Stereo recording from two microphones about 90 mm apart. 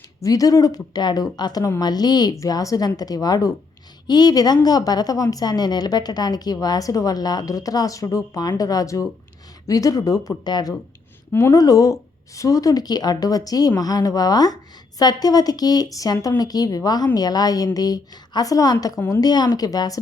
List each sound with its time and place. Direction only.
0.2 s a woman's voice: 40° left (ahead or behind)
2.4 s a woman's voice: 40° left (ahead or behind)
11.3 s speech: 25° left (ahead or behind)
11.5 s a woman's voice: 40° left (ahead or behind)
19.2 s a woman's voice: 50° left (ahead or behind)